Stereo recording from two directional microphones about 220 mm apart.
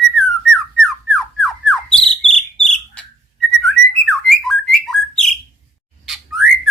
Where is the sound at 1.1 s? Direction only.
Centre (ahead or behind).